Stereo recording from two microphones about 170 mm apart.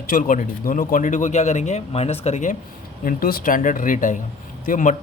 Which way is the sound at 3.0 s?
55° left (ahead or behind).